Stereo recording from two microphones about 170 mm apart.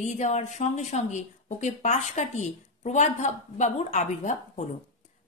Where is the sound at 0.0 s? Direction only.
45° left (ahead or behind).